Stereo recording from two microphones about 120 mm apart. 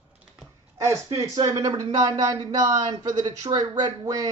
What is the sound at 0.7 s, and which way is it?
Speech, 25° right (ahead or behind).